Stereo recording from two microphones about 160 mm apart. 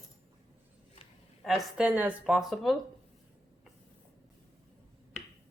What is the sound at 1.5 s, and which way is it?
Speech, centre (ahead or behind).